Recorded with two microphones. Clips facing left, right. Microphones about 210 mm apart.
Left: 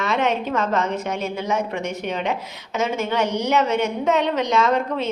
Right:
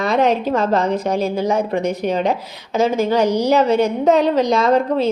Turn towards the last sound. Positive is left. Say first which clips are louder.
# right 5 dB
turn(degrees=-35)  # may be behind; listen again after turning